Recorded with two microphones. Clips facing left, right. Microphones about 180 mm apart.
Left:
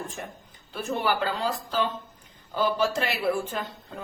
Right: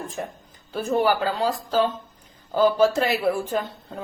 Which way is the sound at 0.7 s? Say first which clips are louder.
Right 6 dB; 40° right (ahead or behind).